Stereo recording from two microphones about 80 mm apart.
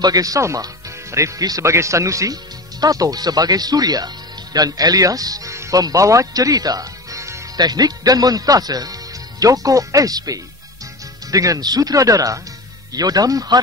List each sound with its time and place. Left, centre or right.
0.0 s speech: right
7.5 s speech: right